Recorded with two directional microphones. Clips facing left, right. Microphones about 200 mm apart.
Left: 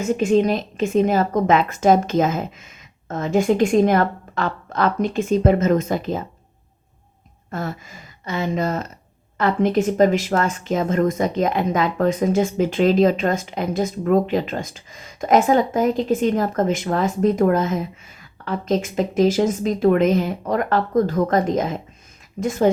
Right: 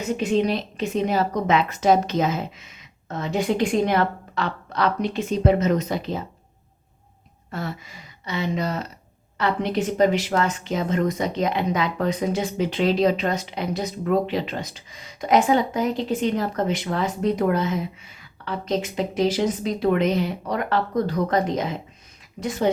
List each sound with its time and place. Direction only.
0.0 s a woman's voice: 45° left (ahead or behind)
7.5 s a woman's voice: 45° left (ahead or behind)